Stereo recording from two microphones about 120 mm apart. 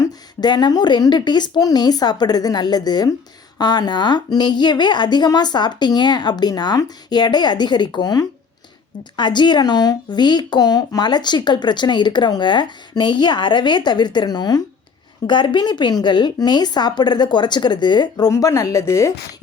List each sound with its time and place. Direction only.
0.0 s speech: 35° left (ahead or behind)
18.3 s a woman's voice: 25° left (ahead or behind)